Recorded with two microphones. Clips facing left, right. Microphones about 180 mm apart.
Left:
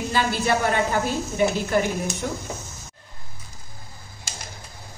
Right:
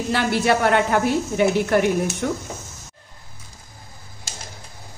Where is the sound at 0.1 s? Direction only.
70° right (ahead or behind).